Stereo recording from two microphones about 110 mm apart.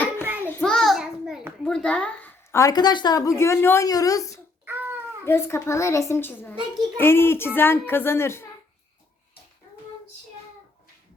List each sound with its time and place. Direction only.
0.3 s child singing: 20° left (ahead or behind)
0.6 s child singing: 5° left (ahead or behind)
1.6 s speech: 10° left (ahead or behind)
2.5 s speech: 25° left (ahead or behind)
2.7 s a child's voice: 40° left (ahead or behind); by 3.8 s 25° left (ahead or behind)
3.8 s speech: 35° left (ahead or behind)
4.6 s a sound: 15° right (ahead or behind)
5.2 s a child's voice: 20° left (ahead or behind)